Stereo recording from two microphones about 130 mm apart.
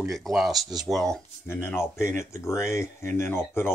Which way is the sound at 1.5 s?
15° left (ahead or behind).